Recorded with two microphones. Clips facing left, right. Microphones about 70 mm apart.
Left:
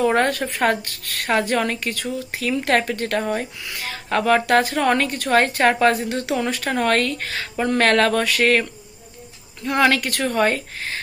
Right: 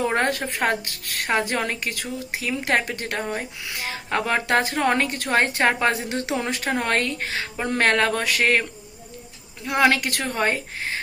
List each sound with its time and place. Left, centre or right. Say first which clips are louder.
0.0 s a woman's voice: left 4 dB; centre
3.7 s a woman's voice: left 1 dB; right
9.6 s a woman's voice: left 1 dB; centre